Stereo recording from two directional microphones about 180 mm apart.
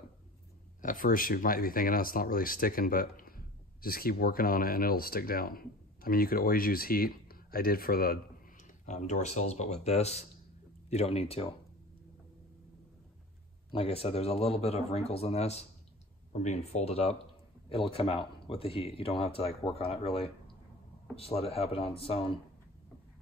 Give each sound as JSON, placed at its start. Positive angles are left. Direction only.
{"t": 0.8, "sound": "speech", "side_deg": 50}
{"t": 8.8, "sound": "speech", "side_deg": 40}
{"t": 13.7, "sound": "speech", "side_deg": 30}